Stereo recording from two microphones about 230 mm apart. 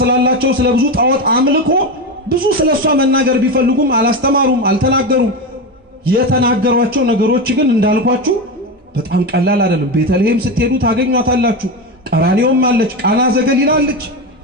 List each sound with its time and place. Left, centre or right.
0.0 s a man's voice: right
9.1 s a man's voice: right